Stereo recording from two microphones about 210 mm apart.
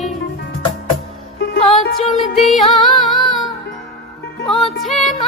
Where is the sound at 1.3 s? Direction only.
50° left (ahead or behind).